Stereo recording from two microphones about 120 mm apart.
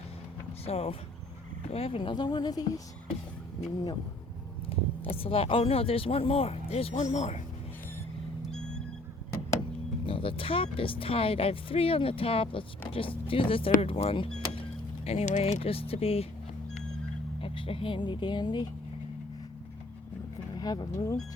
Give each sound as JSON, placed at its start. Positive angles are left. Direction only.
{"t": 0.6, "sound": "speech", "side_deg": 55}
{"t": 2.0, "sound": "a woman's voice", "side_deg": 40}
{"t": 4.7, "sound": "speech", "side_deg": 50}
{"t": 6.9, "sound": "speech", "side_deg": 75}
{"t": 10.1, "sound": "speech", "side_deg": 50}
{"t": 15.0, "sound": "speech", "side_deg": 70}
{"t": 15.6, "sound": "speech", "side_deg": 55}
{"t": 17.4, "sound": "speech", "side_deg": 50}
{"t": 20.6, "sound": "speech", "side_deg": 35}